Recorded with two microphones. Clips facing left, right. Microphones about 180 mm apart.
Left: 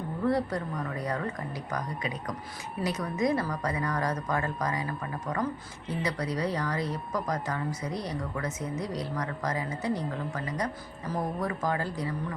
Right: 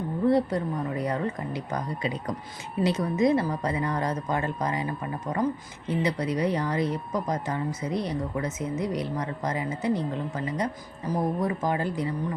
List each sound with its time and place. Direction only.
0.3 s speech: 25° right (ahead or behind)